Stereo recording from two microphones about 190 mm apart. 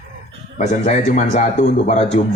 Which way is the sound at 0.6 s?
35° left (ahead or behind).